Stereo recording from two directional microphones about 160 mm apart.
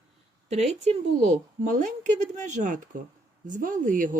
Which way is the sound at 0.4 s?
45° right (ahead or behind).